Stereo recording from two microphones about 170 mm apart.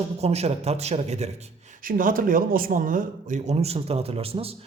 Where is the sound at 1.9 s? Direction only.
55° right (ahead or behind).